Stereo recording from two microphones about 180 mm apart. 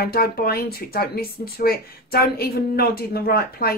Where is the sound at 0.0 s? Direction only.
55° left (ahead or behind).